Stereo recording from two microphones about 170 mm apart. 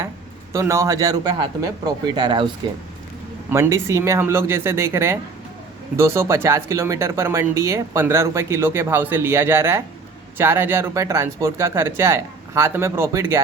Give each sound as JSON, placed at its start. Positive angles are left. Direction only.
{"t": 0.5, "sound": "speech", "side_deg": -15}
{"t": 3.5, "sound": "speech", "side_deg": -15}